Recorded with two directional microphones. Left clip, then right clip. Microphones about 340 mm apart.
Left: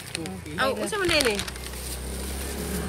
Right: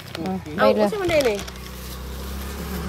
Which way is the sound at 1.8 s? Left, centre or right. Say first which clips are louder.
Even; left.